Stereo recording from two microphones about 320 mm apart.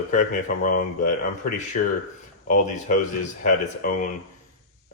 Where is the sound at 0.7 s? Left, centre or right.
Left.